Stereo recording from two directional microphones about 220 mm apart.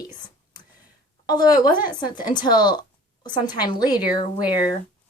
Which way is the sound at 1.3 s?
20° left (ahead or behind).